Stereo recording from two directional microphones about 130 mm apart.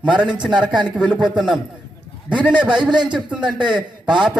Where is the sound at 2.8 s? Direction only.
35° right (ahead or behind).